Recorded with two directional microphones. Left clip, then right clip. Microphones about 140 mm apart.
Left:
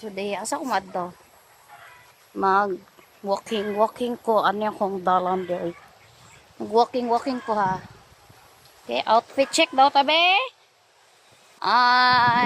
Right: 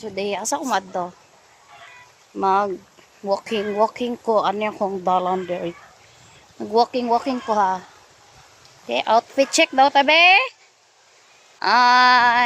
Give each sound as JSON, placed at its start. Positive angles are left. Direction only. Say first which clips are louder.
{"t": 0.0, "sound": "speech", "louder": "right 4 dB", "side_deg": -40}
{"t": 2.4, "sound": "speech", "louder": "right 1 dB", "side_deg": -10}
{"t": 3.4, "sound": "speech", "louder": "right 2 dB", "side_deg": -20}
{"t": 8.9, "sound": "speech", "louder": "right 2 dB", "side_deg": -30}
{"t": 11.6, "sound": "a sound", "louder": "right 4 dB", "side_deg": -55}